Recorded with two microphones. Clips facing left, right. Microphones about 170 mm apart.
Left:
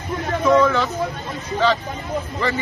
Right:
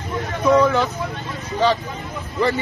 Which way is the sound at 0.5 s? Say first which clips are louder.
Right 1 dB; 15° right (ahead or behind).